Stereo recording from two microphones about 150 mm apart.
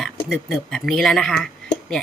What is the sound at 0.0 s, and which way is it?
Speech, centre (ahead or behind).